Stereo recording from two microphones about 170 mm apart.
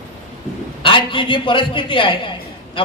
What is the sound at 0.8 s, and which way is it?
A man's voice, 30° left (ahead or behind).